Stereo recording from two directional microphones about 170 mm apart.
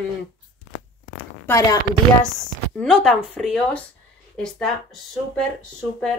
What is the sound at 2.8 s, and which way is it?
Speech, 5° left (ahead or behind).